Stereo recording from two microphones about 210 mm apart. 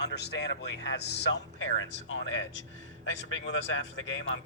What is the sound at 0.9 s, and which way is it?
Speech, 55° left (ahead or behind).